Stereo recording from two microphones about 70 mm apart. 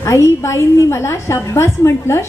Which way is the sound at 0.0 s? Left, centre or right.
Left.